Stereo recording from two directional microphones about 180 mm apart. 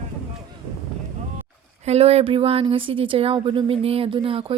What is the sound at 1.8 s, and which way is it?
Speech, 35° right (ahead or behind).